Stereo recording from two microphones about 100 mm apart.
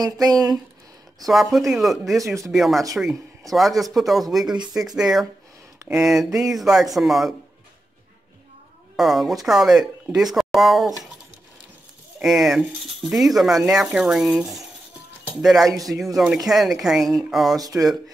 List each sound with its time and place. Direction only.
0.2 s speech: 40° right (ahead or behind)
1.2 s speech: centre (ahead or behind)
2.2 s speech: 30° right (ahead or behind)
2.5 s speech: centre (ahead or behind)
8.9 s speech: centre (ahead or behind)
12.2 s speech: 5° right (ahead or behind)
17.6 s speech: 35° right (ahead or behind)